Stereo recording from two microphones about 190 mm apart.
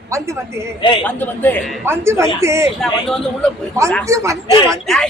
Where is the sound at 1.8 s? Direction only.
15° right (ahead or behind).